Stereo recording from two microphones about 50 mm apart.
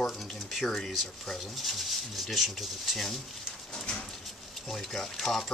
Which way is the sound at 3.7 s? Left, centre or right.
Centre.